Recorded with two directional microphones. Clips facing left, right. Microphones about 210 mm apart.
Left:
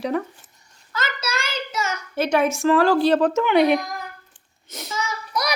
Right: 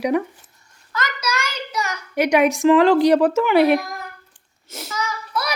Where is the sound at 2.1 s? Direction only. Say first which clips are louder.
Right 4 dB; 15° right (ahead or behind).